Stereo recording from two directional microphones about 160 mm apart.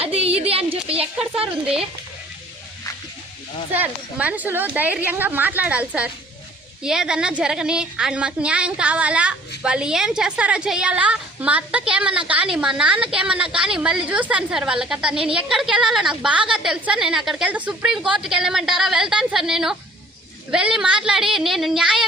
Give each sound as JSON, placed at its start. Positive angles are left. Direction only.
{"t": 0.0, "sound": "a sound", "side_deg": -40}
{"t": 1.2, "sound": "a woman's voice", "side_deg": -5}
{"t": 3.8, "sound": "a woman's voice", "side_deg": -10}